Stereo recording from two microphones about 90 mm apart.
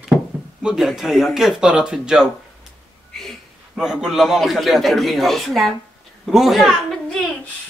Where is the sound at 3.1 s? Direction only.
5° left (ahead or behind).